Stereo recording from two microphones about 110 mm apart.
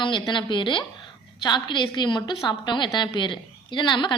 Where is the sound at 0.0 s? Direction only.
45° left (ahead or behind).